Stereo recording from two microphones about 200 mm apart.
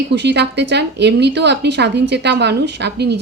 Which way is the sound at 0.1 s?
60° right (ahead or behind).